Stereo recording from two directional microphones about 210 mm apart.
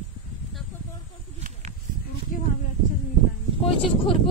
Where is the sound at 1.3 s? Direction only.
35° right (ahead or behind).